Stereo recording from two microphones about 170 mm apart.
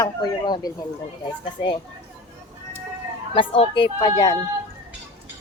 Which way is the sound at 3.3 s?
30° left (ahead or behind).